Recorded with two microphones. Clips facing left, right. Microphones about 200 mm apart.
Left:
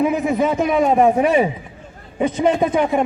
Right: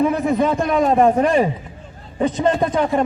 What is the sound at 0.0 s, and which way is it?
A man's voice, 10° left (ahead or behind).